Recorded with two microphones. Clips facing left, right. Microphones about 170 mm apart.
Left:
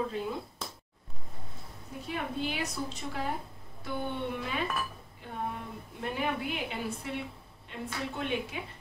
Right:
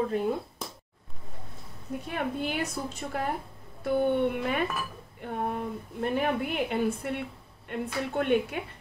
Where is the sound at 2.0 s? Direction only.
55° right (ahead or behind).